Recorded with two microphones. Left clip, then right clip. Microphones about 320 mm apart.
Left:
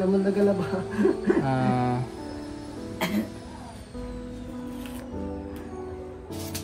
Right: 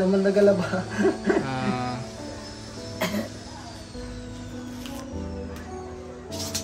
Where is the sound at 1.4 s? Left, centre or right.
Centre.